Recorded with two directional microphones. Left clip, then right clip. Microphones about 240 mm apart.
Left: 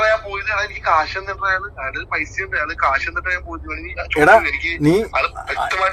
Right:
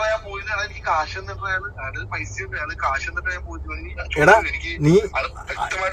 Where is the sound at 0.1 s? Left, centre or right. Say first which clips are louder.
Left 6 dB; left.